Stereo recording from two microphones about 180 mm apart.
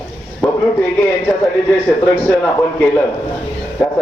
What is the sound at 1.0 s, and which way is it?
A man's voice, 15° left (ahead or behind).